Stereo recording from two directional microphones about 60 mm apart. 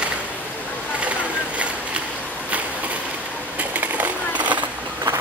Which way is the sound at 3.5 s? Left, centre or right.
Right.